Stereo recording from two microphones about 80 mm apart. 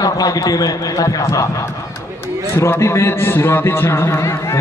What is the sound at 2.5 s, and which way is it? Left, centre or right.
A man's voice, left.